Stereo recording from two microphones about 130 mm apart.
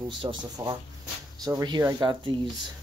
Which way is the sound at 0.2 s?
35° right (ahead or behind).